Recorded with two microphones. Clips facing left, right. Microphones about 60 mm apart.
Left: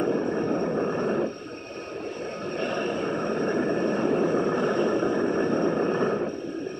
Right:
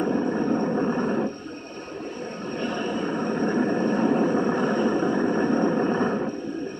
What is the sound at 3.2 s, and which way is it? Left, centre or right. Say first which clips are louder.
Vehicle: right 3 dB; right.